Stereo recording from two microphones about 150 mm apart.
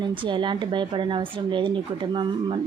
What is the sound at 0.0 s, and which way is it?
Speech, 35° right (ahead or behind).